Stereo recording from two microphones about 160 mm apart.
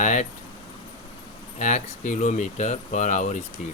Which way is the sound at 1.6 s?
50° left (ahead or behind).